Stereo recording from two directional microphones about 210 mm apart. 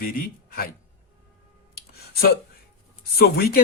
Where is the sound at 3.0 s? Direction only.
45° left (ahead or behind).